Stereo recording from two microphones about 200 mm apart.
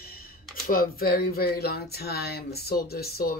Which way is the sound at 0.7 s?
45° left (ahead or behind).